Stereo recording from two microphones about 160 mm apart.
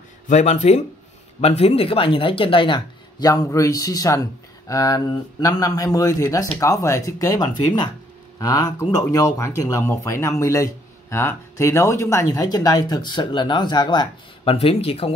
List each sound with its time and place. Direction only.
0.3 s speech: 50° left (ahead or behind)